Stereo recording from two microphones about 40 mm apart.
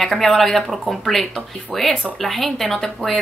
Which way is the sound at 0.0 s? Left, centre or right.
Centre.